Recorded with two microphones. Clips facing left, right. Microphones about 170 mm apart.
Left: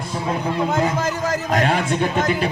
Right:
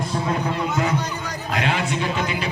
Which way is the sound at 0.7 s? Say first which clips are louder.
Left 3 dB; 90° left.